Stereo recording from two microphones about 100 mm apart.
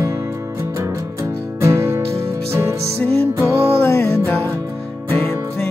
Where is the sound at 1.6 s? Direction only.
30° right (ahead or behind).